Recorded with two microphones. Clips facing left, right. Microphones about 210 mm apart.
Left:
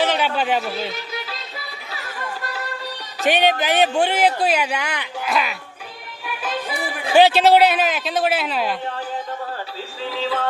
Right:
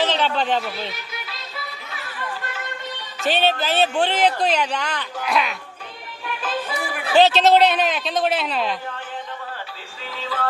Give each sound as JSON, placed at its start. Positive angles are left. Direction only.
{"t": 0.0, "sound": "a sound", "side_deg": 10}
{"t": 1.9, "sound": "chatter", "side_deg": 40}
{"t": 3.2, "sound": "speech", "side_deg": 15}
{"t": 10.2, "sound": "music", "side_deg": 30}